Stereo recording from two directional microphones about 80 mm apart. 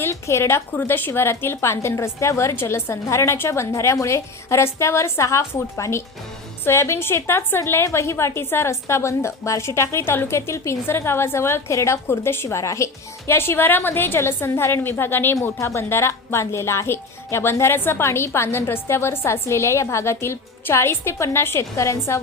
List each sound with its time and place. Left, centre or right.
0.0 s a woman's voice: left